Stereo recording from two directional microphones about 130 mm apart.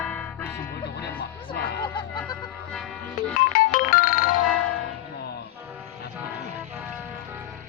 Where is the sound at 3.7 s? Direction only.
90° left.